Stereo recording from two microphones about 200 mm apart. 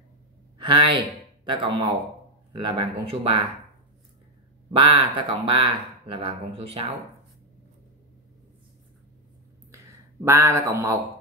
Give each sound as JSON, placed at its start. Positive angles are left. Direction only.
{"t": 0.6, "sound": "speech", "side_deg": -25}
{"t": 4.7, "sound": "speech", "side_deg": -25}
{"t": 10.2, "sound": "speech", "side_deg": -15}